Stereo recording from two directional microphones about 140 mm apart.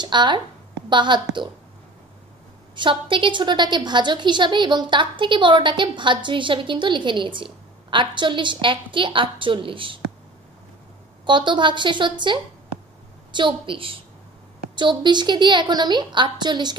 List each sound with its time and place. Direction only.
0.0 s a woman's voice: 30° right (ahead or behind)
2.7 s a woman's voice: 35° right (ahead or behind)
11.2 s a woman's voice: 35° right (ahead or behind)